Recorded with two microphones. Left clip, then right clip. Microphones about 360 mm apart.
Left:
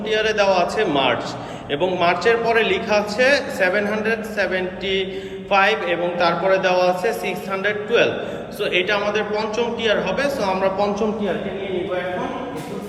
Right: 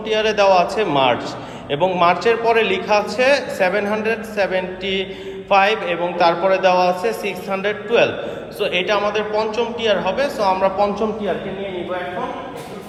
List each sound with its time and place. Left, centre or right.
0.1 s a man's voice: centre